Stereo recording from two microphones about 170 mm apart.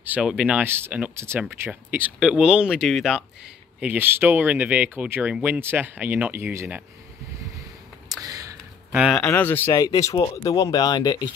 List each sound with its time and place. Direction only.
0.0 s speech: 5° right (ahead or behind)
8.2 s a sound: 20° right (ahead or behind)
8.9 s speech: 5° right (ahead or behind)
9.2 s speech: 10° left (ahead or behind)